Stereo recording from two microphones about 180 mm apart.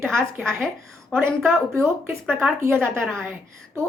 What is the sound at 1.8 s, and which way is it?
Speech, 10° right (ahead or behind).